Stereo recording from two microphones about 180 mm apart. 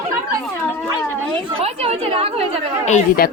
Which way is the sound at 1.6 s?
30° right (ahead or behind).